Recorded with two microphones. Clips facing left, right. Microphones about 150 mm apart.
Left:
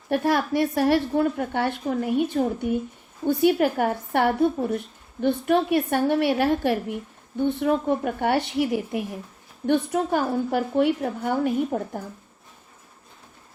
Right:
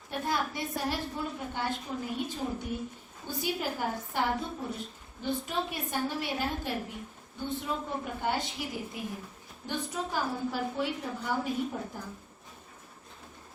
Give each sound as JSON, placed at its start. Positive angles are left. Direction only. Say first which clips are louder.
{"t": 0.1, "sound": "a woman's voice", "louder": "left 10 dB", "side_deg": 70}